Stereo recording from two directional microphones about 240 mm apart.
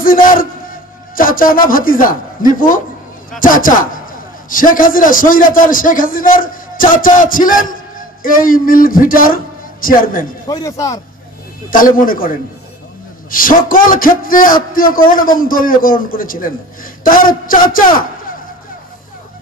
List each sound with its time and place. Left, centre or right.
0.0 s a man's voice: left
10.5 s speech: centre
11.7 s a man's voice: left